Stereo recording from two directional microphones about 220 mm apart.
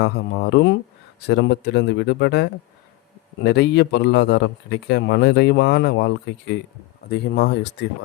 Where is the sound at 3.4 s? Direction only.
50° left (ahead or behind).